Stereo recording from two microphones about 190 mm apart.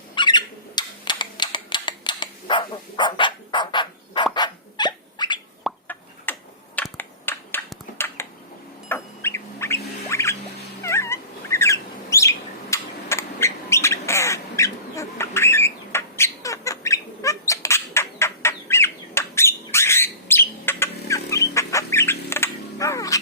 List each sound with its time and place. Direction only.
0.1 s squawk: 25° left (ahead or behind)
5.6 s a sound: 10° left (ahead or behind)
6.7 s finger snapping: 10° left (ahead or behind)
7.9 s a sound: 10° left (ahead or behind)
10.1 s music: 15° left (ahead or behind)
10.8 s cat: 15° left (ahead or behind)
12.7 s bird: 15° left (ahead or behind)